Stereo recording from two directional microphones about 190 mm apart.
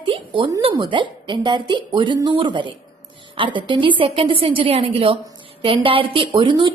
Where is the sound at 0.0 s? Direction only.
25° right (ahead or behind).